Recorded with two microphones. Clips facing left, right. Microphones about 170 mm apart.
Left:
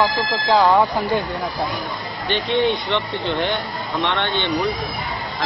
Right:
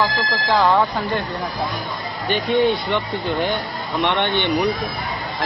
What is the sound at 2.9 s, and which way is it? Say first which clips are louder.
Speech: even; 10° right (ahead or behind).